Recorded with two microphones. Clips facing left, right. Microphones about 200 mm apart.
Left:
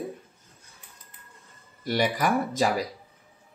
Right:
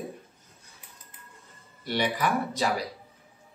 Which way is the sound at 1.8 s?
45° left (ahead or behind).